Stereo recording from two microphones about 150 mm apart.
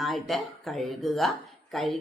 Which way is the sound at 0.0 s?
Centre (ahead or behind).